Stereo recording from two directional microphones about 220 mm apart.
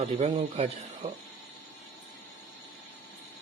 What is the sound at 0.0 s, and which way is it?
Speech, 30° right (ahead or behind).